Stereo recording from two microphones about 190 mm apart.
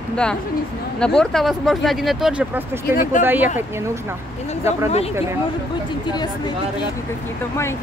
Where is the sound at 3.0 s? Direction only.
40° left (ahead or behind).